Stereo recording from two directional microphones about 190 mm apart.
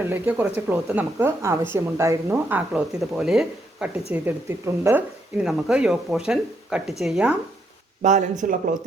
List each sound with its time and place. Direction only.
0.1 s speech: 10° right (ahead or behind)
8.0 s speech: 40° right (ahead or behind)